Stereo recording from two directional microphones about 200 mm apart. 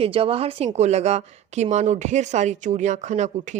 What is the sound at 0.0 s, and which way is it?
Speech, 30° right (ahead or behind).